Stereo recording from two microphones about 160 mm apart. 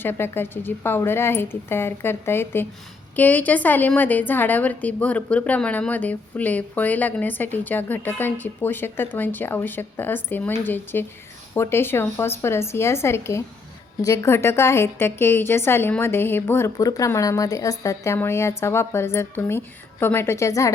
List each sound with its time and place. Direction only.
0.0 s a woman's voice: 15° left (ahead or behind)